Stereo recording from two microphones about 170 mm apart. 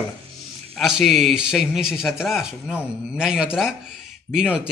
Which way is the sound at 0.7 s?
Centre (ahead or behind).